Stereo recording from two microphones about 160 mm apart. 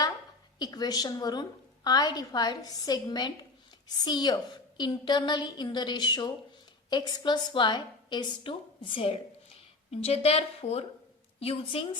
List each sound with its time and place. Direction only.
0.6 s a woman's voice: 25° left (ahead or behind)